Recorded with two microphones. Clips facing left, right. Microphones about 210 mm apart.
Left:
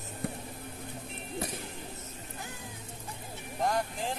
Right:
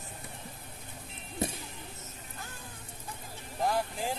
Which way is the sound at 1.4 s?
25° right (ahead or behind).